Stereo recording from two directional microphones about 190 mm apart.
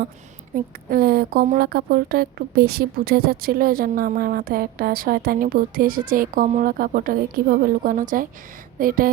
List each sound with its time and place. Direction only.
0.5 s a woman's voice: 50° right (ahead or behind)